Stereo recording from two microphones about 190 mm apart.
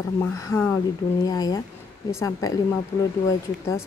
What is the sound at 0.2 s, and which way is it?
Speech, 10° left (ahead or behind).